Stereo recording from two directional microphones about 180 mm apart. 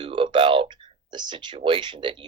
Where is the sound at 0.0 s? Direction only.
30° right (ahead or behind).